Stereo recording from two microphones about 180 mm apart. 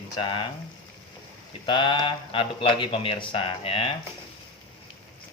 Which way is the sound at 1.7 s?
25° left (ahead or behind).